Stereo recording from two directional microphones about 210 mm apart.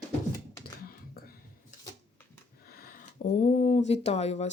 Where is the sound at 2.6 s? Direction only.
45° left (ahead or behind).